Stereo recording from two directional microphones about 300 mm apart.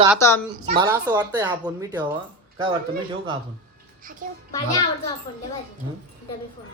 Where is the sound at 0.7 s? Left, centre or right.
Centre.